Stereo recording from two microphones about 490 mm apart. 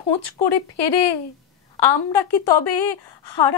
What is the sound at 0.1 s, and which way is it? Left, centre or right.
A woman's voice, left.